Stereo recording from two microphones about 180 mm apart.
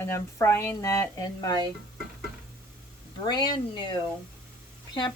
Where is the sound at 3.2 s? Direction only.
25° left (ahead or behind).